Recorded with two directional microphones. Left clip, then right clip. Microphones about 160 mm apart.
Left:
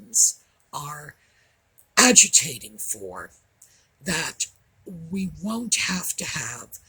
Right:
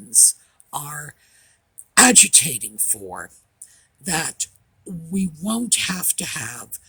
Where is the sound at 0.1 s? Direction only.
50° right (ahead or behind).